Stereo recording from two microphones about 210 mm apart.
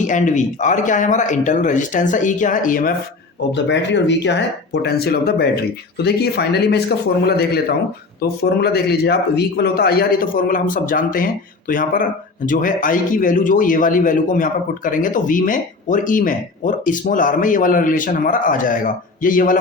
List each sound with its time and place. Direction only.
0.0 s a man's voice: 35° left (ahead or behind)
3.5 s a man's voice: 55° left (ahead or behind); by 19.5 s 40° left (ahead or behind)